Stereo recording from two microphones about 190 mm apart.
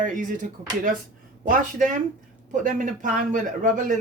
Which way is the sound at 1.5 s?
40° right (ahead or behind).